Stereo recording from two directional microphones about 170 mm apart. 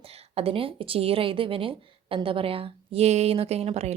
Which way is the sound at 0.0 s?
35° right (ahead or behind).